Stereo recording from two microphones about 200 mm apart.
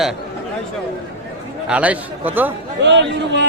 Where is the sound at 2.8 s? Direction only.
60° right (ahead or behind).